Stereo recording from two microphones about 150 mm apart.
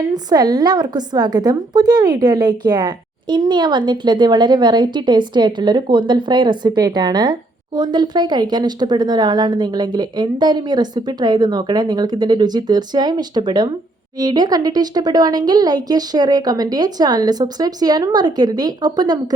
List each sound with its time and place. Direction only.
0.1 s a woman's voice: 25° right (ahead or behind)